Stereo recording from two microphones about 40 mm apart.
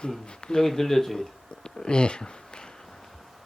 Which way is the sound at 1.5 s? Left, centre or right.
Left.